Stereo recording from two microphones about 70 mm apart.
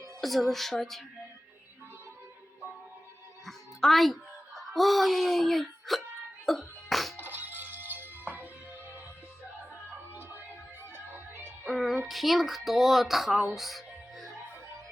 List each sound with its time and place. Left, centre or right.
0.2 s speech: centre
3.4 s a woman's voice: centre
6.4 s music: centre
7.2 s music: right
11.1 s music: right
11.6 s a sound: centre